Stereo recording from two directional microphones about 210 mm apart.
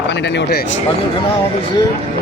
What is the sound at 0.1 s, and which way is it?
Speech, 55° left (ahead or behind).